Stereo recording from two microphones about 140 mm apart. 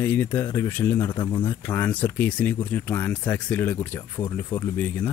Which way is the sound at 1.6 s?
15° left (ahead or behind).